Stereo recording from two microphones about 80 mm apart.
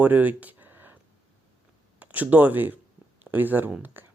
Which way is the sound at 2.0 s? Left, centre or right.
Centre.